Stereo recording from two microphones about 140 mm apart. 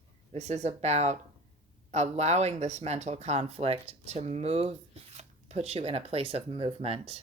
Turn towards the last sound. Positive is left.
turn(degrees=-45)  # may be behind; listen again after turning